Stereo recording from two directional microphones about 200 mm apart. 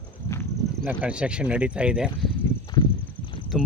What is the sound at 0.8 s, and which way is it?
Speech, 10° right (ahead or behind).